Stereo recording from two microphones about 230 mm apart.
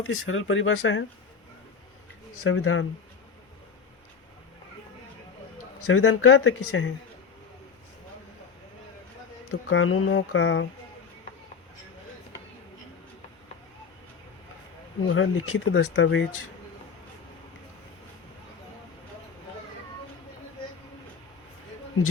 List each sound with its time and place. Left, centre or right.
0.0 s speech: left
2.4 s speech: left
5.8 s speech: left
9.5 s speech: left
15.0 s speech: left